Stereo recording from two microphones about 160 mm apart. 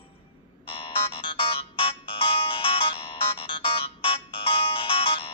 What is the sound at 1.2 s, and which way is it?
Music, 35° left (ahead or behind).